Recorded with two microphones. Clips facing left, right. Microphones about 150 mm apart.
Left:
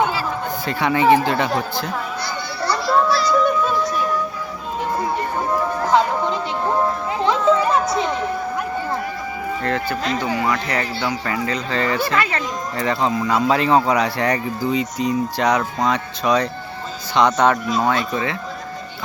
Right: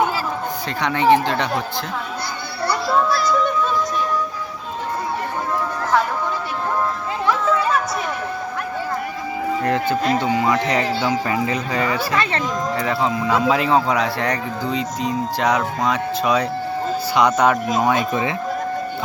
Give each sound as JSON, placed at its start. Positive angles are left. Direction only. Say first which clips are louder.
{"t": 0.8, "sound": "speech", "louder": "left 1 dB", "side_deg": 5}
{"t": 2.8, "sound": "music", "louder": "left 2 dB", "side_deg": 0}
{"t": 7.3, "sound": "children playing", "louder": "left 3 dB", "side_deg": 20}
{"t": 9.6, "sound": "speech", "louder": "right 3 dB", "side_deg": -20}
{"t": 17.8, "sound": "speech", "louder": "right 2 dB", "side_deg": -20}